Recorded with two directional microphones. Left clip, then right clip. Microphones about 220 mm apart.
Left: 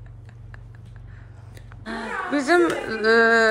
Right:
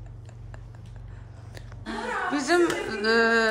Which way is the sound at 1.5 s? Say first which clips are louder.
Left 2 dB; 5° right (ahead or behind).